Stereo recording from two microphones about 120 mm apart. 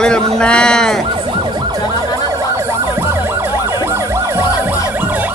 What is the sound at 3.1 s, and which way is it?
Emergency vehicle, 20° right (ahead or behind).